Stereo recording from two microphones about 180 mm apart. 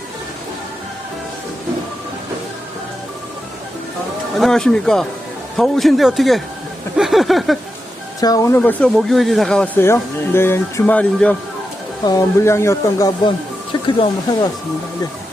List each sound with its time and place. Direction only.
4.4 s a man's voice: centre (ahead or behind)
6.9 s a sound: centre (ahead or behind)
8.2 s speech: 20° left (ahead or behind)